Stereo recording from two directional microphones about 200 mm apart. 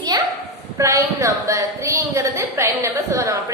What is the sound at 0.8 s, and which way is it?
A woman's voice, 15° right (ahead or behind).